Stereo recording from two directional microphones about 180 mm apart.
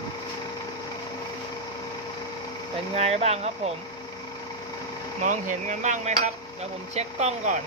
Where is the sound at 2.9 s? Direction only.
35° right (ahead or behind).